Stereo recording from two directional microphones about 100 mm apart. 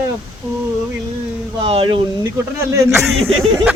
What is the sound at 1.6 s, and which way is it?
Speech, 65° right (ahead or behind).